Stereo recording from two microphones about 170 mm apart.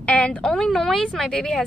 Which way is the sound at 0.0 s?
5° left (ahead or behind).